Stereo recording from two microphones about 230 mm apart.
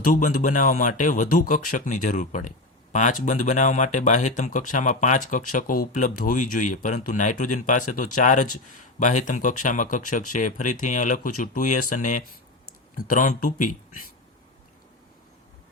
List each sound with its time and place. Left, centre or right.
0.0 s speech: left